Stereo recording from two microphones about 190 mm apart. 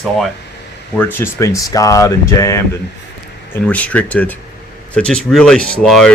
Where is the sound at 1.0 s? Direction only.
10° left (ahead or behind).